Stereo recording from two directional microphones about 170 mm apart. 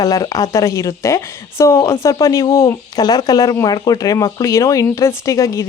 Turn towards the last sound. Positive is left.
turn(degrees=20)  # may be behind; listen again after turning